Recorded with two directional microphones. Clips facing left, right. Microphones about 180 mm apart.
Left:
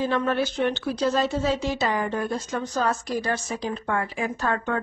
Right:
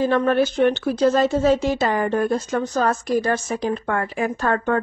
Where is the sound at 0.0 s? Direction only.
50° right (ahead or behind).